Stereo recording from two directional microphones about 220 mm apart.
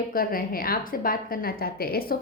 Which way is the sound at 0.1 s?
40° left (ahead or behind).